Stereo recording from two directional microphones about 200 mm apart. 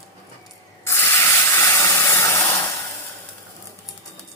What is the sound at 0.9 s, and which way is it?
Spray, 10° left (ahead or behind).